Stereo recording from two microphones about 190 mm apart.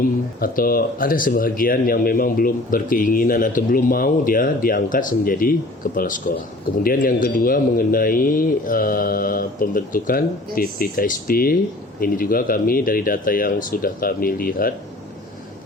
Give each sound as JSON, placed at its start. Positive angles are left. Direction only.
{"t": 0.3, "sound": "speech", "side_deg": 50}